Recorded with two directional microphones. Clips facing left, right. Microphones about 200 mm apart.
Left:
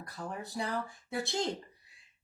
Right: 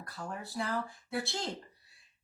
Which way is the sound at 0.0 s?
20° left (ahead or behind).